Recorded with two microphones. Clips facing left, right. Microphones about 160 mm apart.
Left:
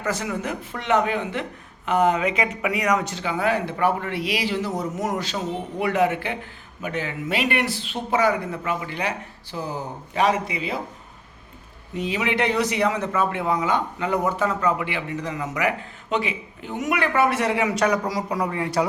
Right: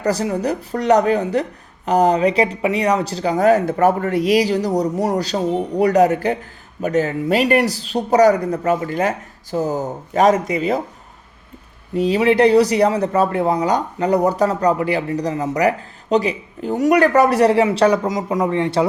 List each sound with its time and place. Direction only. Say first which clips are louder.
0.0 s speech: right 7 dB; 35° right (ahead or behind)
11.9 s speech: right 9 dB; 35° right (ahead or behind)